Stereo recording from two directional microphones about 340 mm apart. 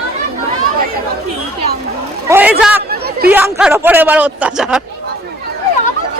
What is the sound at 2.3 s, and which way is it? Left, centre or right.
Speech, centre.